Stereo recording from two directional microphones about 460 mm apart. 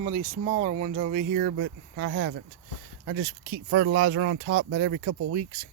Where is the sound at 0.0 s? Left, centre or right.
Centre.